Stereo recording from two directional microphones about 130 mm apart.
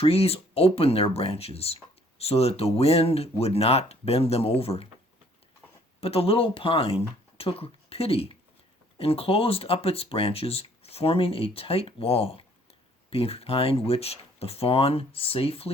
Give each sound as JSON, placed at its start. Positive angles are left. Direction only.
{"t": 0.0, "sound": "speech", "side_deg": 50}
{"t": 6.0, "sound": "speech", "side_deg": 50}